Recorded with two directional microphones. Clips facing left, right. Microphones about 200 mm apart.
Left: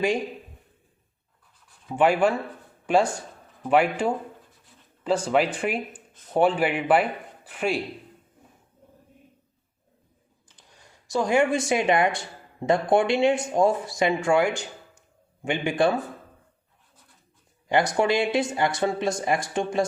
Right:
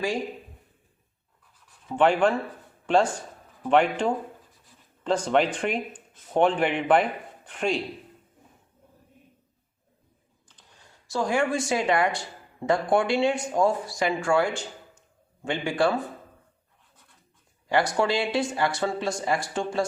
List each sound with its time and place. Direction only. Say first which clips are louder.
1.9 s speech: even; 10° left (ahead or behind)
10.5 s speech: left 1 dB; 15° left (ahead or behind)
17.7 s speech: left 2 dB; 20° left (ahead or behind)